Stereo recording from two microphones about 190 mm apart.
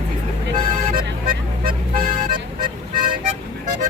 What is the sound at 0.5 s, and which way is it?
Music, 50° right (ahead or behind).